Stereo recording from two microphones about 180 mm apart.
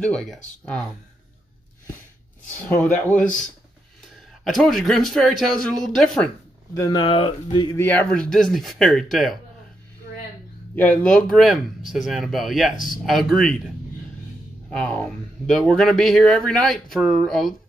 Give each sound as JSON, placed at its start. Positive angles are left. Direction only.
{"t": 0.0, "sound": "speech", "side_deg": 5}
{"t": 2.7, "sound": "a man's voice", "side_deg": 10}
{"t": 6.7, "sound": "speech", "side_deg": 20}
{"t": 7.8, "sound": "speech", "side_deg": 10}
{"t": 10.8, "sound": "speech", "side_deg": 10}
{"t": 14.7, "sound": "speech", "side_deg": 5}